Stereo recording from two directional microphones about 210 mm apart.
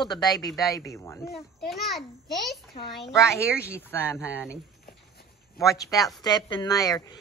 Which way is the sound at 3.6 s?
5° right (ahead or behind).